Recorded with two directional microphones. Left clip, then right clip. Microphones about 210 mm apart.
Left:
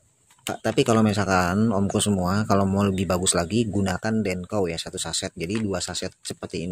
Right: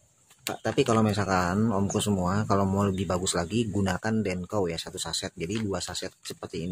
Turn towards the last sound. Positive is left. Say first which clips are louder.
# left 4 dB
turn(degrees=20)  # may be behind; listen again after turning